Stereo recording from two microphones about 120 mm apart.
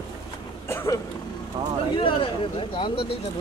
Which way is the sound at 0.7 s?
25° left (ahead or behind).